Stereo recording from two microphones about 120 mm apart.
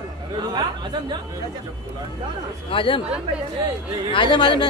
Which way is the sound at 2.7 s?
45° left (ahead or behind).